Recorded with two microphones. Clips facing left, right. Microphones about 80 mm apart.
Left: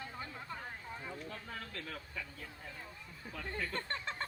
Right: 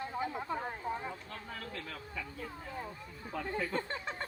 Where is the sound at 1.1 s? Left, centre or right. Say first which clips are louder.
Even; centre.